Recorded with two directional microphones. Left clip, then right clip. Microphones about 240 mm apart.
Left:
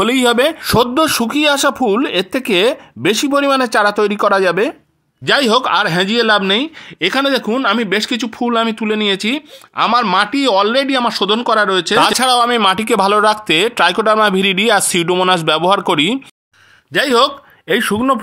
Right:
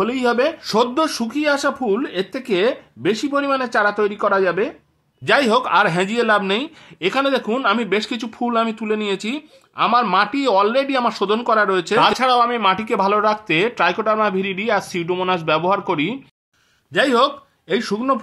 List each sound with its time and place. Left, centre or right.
0.0 s speech: left
5.2 s speech: left
12.1 s speech: left
16.9 s speech: left